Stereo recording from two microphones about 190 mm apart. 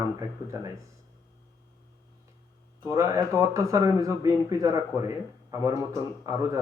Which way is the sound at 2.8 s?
15° right (ahead or behind).